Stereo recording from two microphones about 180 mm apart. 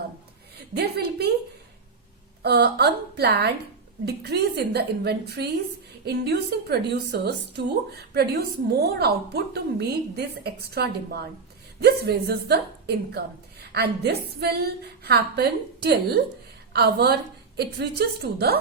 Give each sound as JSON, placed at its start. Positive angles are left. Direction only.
{"t": 0.8, "sound": "a woman's voice", "side_deg": -60}
{"t": 2.4, "sound": "a woman's voice", "side_deg": -65}
{"t": 18.3, "sound": "a woman's voice", "side_deg": -60}